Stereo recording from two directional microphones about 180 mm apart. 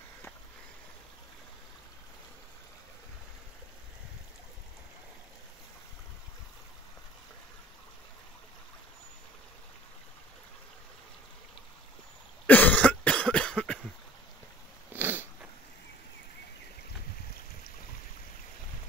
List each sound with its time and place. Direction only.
12.4 s cough: 10° left (ahead or behind)
14.9 s cat: 10° right (ahead or behind)